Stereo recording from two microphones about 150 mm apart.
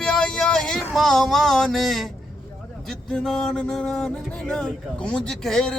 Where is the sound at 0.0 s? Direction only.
5° left (ahead or behind).